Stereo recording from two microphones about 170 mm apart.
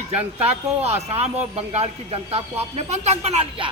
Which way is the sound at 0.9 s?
40° right (ahead or behind).